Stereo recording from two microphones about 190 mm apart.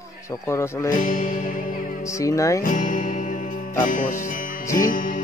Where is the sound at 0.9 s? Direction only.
45° left (ahead or behind).